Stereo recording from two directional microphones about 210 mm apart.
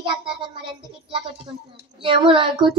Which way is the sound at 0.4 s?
25° right (ahead or behind).